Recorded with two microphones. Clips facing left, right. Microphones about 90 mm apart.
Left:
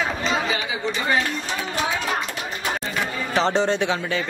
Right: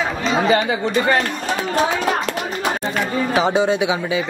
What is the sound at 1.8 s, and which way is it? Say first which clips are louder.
Speech: right 6 dB; 45° right (ahead or behind).